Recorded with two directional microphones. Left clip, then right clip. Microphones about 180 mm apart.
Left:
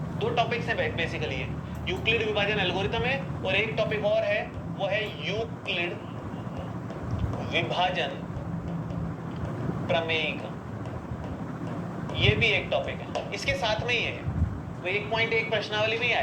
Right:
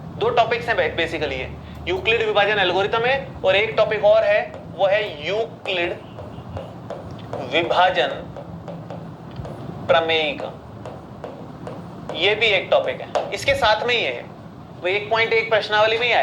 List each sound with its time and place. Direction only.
0.2 s speech: 50° right (ahead or behind)
7.3 s speech: 50° right (ahead or behind)
9.8 s speech: 50° right (ahead or behind)
12.0 s speech: 50° right (ahead or behind)